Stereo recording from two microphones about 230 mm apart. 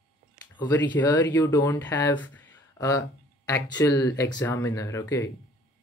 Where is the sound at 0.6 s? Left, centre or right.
Centre.